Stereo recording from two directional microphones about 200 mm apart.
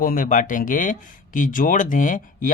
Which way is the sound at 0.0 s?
45° left (ahead or behind).